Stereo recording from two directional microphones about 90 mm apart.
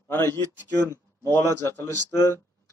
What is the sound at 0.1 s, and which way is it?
A man's voice, 25° left (ahead or behind).